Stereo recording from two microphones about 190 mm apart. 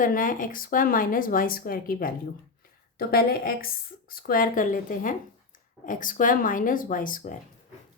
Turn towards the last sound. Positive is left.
turn(degrees=45)  # may be behind; listen again after turning